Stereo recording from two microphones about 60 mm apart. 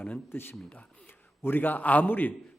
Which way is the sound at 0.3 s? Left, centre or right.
Left.